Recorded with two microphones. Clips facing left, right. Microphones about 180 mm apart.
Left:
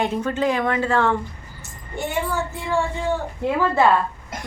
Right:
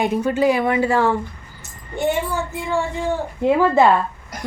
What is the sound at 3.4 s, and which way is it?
Speech, 15° right (ahead or behind).